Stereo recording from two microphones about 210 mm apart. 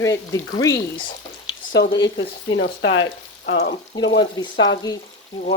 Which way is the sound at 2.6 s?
65° left (ahead or behind).